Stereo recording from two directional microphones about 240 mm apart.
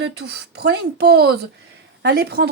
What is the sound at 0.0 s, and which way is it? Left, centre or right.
Speech, right.